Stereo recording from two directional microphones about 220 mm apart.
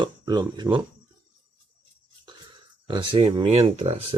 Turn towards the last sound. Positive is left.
turn(degrees=-25)  # may be behind; listen again after turning